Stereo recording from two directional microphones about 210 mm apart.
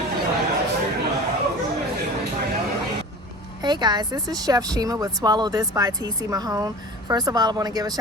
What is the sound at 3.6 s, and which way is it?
Speech, 20° right (ahead or behind).